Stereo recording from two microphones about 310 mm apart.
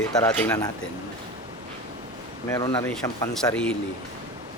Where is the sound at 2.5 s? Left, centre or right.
Centre.